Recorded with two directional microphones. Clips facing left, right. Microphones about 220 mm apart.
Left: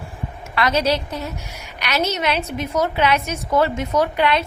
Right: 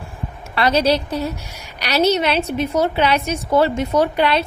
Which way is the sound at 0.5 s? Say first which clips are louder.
Right 3 dB; 30° right (ahead or behind).